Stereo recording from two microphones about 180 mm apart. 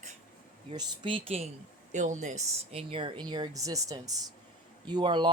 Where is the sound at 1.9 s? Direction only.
40° right (ahead or behind).